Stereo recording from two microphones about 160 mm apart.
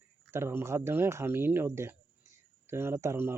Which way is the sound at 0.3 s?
15° right (ahead or behind).